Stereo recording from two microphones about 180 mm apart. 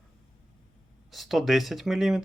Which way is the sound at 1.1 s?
Centre (ahead or behind).